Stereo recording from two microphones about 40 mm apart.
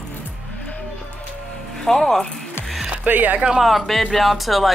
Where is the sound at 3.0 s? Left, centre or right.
Right.